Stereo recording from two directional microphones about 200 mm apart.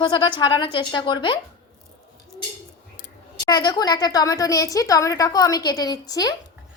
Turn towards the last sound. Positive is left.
turn(degrees=20)  # may be behind; listen again after turning